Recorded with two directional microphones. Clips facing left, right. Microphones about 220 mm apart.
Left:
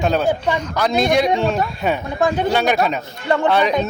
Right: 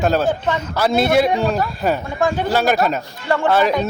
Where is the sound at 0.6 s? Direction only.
5° right (ahead or behind).